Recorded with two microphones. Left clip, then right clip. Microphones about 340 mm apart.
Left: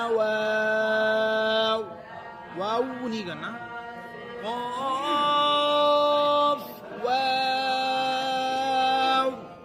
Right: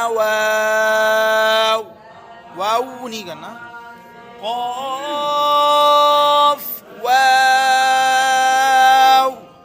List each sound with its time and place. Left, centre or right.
0.0 s mantra: right
2.6 s a man's voice: right
4.4 s music: centre